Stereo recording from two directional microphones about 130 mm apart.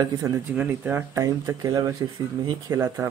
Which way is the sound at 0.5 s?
15° right (ahead or behind).